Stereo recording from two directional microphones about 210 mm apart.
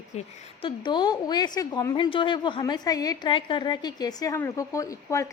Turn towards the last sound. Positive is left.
turn(degrees=15)  # may be behind; listen again after turning